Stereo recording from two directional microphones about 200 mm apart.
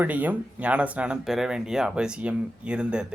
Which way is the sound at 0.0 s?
10° right (ahead or behind).